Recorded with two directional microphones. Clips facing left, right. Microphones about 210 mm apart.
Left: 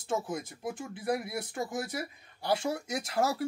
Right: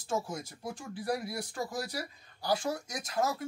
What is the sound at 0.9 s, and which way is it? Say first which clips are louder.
Speech: left 1 dB; 20° left (ahead or behind).